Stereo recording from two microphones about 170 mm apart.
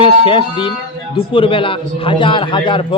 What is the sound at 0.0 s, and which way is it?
A man's voice, 30° left (ahead or behind).